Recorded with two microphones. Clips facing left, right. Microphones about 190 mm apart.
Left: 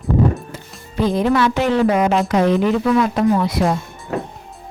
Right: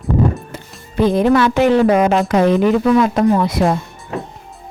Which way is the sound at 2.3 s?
50° right (ahead or behind).